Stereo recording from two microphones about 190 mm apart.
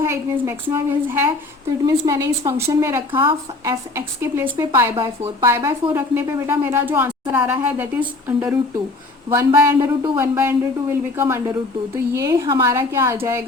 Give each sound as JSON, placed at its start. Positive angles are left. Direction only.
{"t": 0.0, "sound": "speech", "side_deg": -15}
{"t": 3.1, "sound": "speech", "side_deg": -25}